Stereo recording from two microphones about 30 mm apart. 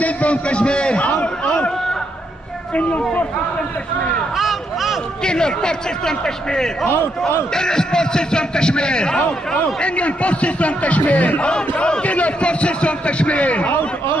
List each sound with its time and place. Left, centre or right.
0.0 s a man's voice: left
1.0 s a sound: left
2.7 s a man's voice: left
4.4 s a sound: centre
5.2 s a man's voice: left
9.8 s a man's voice: left